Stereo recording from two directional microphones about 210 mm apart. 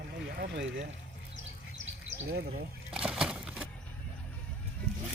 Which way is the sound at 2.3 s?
45° right (ahead or behind).